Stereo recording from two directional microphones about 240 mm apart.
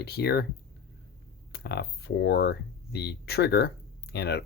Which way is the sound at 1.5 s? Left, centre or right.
Left.